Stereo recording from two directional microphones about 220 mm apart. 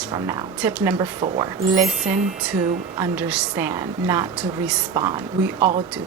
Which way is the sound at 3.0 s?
5° right (ahead or behind).